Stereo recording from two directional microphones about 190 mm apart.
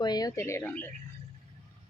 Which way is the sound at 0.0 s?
20° left (ahead or behind).